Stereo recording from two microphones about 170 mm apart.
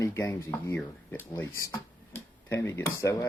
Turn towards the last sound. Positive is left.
turn(degrees=15)  # may be behind; listen again after turning